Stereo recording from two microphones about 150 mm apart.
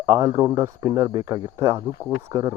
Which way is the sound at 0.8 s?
30° right (ahead or behind).